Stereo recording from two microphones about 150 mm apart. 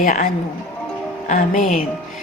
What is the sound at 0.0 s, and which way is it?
Speech, 60° left (ahead or behind).